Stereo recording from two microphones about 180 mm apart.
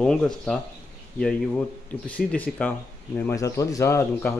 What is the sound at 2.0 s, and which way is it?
Speech, 10° left (ahead or behind).